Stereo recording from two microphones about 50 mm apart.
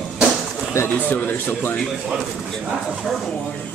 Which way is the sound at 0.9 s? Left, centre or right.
Left.